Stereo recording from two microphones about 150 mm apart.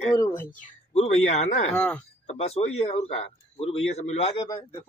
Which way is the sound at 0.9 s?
45° left (ahead or behind).